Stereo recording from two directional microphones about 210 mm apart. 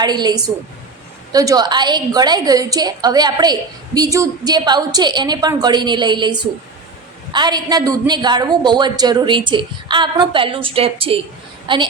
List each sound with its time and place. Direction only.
0.0 s a woman's voice: 20° right (ahead or behind)
7.3 s a woman's voice: 20° right (ahead or behind)